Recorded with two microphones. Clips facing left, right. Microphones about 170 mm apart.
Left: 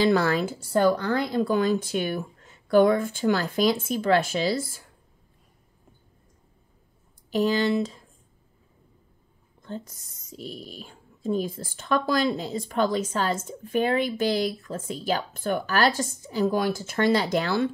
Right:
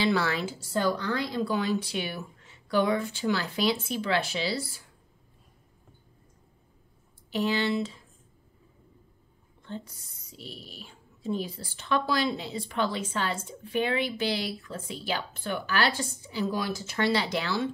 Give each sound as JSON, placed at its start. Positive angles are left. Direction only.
{"t": 0.0, "sound": "speech", "side_deg": 45}
{"t": 7.2, "sound": "speech", "side_deg": 40}
{"t": 9.6, "sound": "speech", "side_deg": 45}